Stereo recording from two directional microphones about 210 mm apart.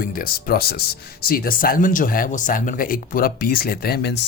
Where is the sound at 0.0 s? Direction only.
45° left (ahead or behind).